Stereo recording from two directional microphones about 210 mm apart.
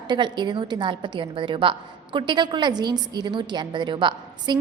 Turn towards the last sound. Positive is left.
turn(degrees=-20)  # may be behind; listen again after turning